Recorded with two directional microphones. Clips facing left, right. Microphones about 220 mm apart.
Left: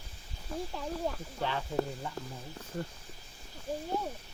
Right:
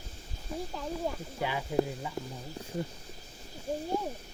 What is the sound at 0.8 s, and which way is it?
Speech, 5° right (ahead or behind).